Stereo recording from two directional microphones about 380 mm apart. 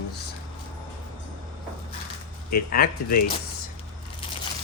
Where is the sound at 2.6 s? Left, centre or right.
Left.